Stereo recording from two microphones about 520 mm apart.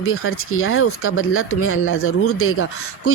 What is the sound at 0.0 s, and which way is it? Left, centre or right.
Speech, left.